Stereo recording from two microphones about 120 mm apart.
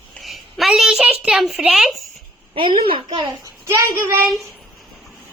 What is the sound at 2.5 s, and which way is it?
Speech, 45° right (ahead or behind).